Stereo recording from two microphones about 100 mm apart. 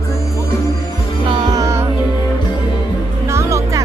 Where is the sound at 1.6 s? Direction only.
30° right (ahead or behind).